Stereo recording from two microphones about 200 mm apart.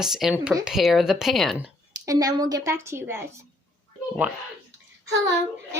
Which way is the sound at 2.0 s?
15° right (ahead or behind).